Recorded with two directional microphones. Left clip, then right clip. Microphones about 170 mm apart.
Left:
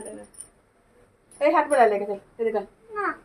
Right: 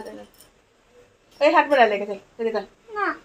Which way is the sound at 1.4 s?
15° right (ahead or behind).